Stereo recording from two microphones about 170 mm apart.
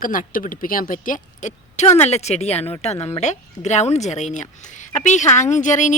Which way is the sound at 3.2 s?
45° left (ahead or behind).